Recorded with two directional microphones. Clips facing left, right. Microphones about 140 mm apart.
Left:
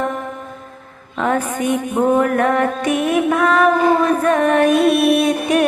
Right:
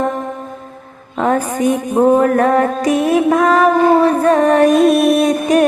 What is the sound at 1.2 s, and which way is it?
Music, 35° right (ahead or behind).